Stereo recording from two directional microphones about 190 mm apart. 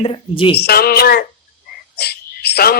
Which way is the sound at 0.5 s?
55° left (ahead or behind).